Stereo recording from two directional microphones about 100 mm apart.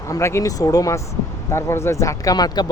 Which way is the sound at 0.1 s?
30° left (ahead or behind).